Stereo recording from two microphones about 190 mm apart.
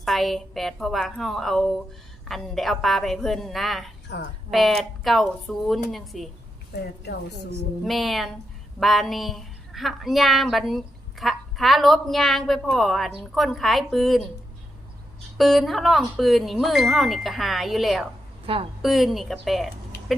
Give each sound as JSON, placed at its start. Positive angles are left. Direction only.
{"t": 0.0, "sound": "a woman's voice", "side_deg": 0}
{"t": 6.7, "sound": "a woman's voice", "side_deg": 60}
{"t": 7.9, "sound": "a woman's voice", "side_deg": 0}
{"t": 15.4, "sound": "a woman's voice", "side_deg": 0}
{"t": 18.4, "sound": "a woman's voice", "side_deg": -30}
{"t": 18.8, "sound": "a woman's voice", "side_deg": 0}